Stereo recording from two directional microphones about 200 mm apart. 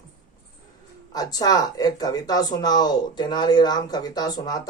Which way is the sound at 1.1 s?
20° left (ahead or behind).